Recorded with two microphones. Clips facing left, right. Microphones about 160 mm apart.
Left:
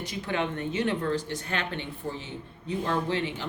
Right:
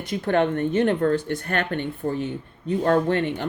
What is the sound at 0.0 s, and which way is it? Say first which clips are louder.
Speech: right 9 dB; 55° right (ahead or behind).